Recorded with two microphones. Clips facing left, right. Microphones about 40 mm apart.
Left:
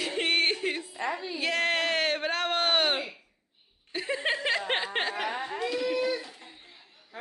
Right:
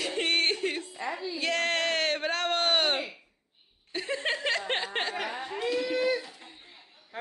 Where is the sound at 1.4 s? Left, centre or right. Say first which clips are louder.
Left 1 dB; centre.